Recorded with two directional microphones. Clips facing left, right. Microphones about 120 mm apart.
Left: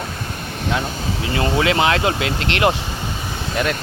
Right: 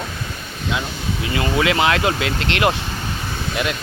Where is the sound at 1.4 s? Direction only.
30° left (ahead or behind).